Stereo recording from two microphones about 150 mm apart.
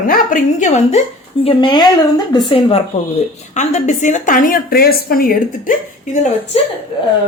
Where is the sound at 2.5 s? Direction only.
40° left (ahead or behind); by 5.7 s 75° left (ahead or behind).